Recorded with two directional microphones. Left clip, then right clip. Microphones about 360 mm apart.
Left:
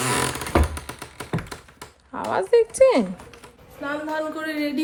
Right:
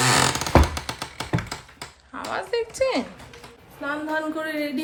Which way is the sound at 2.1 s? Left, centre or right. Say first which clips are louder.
Left 7 dB; centre.